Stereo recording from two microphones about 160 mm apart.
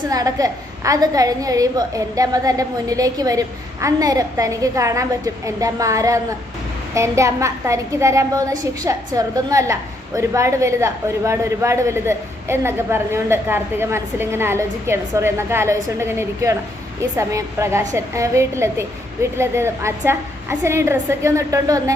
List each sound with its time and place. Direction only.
0.1 s a woman's voice: 20° right (ahead or behind)